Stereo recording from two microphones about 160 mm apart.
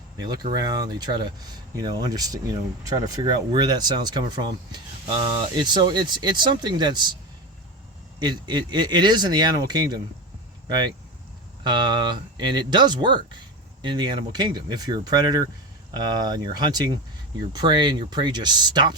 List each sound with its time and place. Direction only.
0.2 s speech: 25° right (ahead or behind)
8.2 s speech: 25° right (ahead or behind)
11.6 s speech: 30° right (ahead or behind)